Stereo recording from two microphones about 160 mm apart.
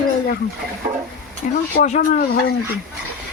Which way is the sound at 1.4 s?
55° left (ahead or behind).